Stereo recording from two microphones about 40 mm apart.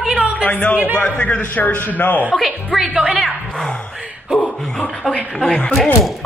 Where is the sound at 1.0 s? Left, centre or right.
Left.